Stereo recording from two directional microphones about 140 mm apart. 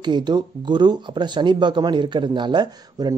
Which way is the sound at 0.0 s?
30° right (ahead or behind).